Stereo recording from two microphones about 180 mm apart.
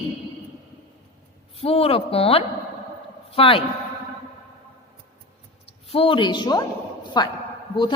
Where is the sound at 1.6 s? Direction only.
30° left (ahead or behind).